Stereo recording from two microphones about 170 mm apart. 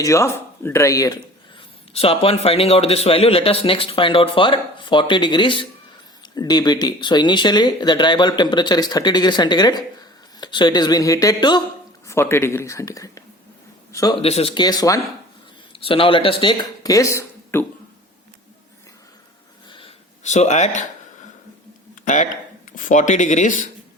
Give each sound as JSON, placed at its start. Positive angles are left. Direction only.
{"t": 0.0, "sound": "speech", "side_deg": 15}
{"t": 1.9, "sound": "a man's voice", "side_deg": 35}
{"t": 12.0, "sound": "a man's voice", "side_deg": 15}
{"t": 14.2, "sound": "a man's voice", "side_deg": 35}
{"t": 14.6, "sound": "speech", "side_deg": 20}
{"t": 15.7, "sound": "speech", "side_deg": 30}
{"t": 20.2, "sound": "speech", "side_deg": 45}
{"t": 22.0, "sound": "speech", "side_deg": 45}